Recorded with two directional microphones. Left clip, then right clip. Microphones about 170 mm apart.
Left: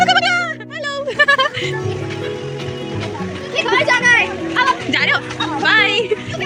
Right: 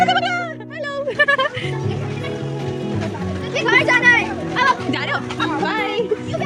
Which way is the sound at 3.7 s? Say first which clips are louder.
Even; 55° left (ahead or behind).